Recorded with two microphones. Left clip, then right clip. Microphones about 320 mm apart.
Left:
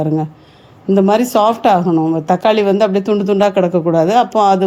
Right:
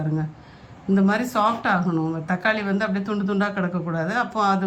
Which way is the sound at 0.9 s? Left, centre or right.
Left.